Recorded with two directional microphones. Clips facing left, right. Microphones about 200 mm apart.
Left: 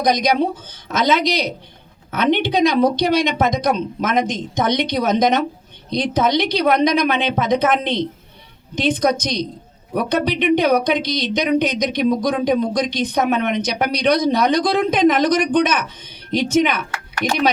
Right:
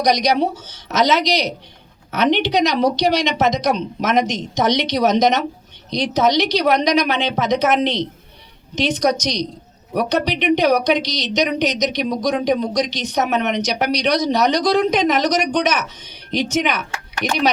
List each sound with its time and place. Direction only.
0.1 s speech: 55° left (ahead or behind)